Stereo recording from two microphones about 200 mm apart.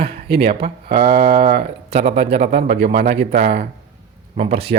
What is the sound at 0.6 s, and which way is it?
Speech, 50° right (ahead or behind).